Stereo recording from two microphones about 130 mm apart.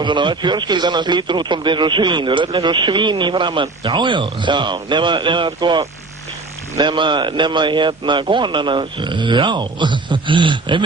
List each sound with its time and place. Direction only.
0.0 s a man's voice: 35° right (ahead or behind)